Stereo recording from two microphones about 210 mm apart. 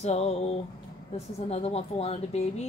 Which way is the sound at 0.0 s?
30° left (ahead or behind).